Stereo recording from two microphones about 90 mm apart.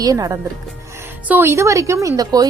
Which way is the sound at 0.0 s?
40° right (ahead or behind).